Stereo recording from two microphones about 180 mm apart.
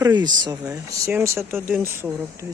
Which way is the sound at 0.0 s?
25° right (ahead or behind).